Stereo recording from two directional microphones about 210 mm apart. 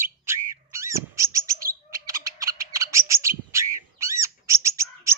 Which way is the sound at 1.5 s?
45° right (ahead or behind).